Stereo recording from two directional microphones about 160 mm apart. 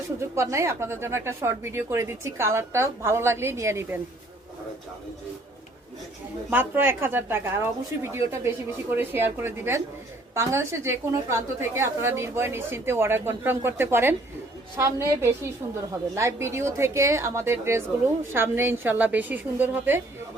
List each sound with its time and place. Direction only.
0.2 s speech: 20° right (ahead or behind)
6.5 s speech: 15° right (ahead or behind)